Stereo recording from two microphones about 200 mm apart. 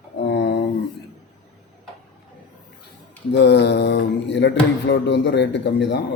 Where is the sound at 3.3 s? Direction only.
60° left (ahead or behind).